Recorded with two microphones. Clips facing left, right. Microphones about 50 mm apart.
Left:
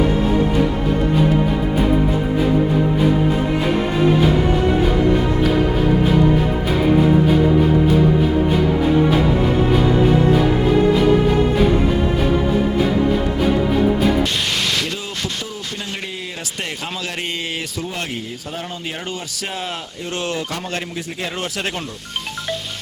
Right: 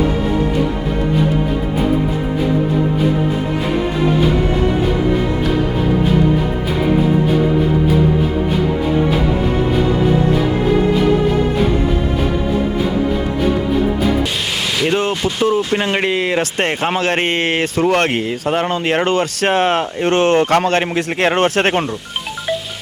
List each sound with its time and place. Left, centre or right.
15.4 s speech: right
16.6 s a man's voice: right
17.8 s a man's voice: right